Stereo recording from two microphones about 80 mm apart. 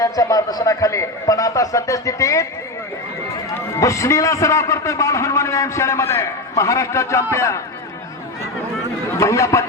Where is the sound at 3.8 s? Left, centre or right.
Left.